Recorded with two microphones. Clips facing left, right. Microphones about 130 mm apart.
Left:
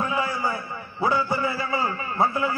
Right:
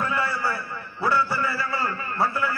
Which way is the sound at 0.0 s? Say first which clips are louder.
Left 1 dB; 15° left (ahead or behind).